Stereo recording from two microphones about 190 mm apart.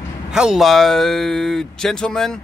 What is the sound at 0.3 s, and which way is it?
Speech, 5° right (ahead or behind).